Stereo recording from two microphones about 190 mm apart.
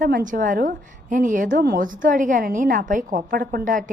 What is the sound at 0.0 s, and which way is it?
A woman's voice, 45° right (ahead or behind).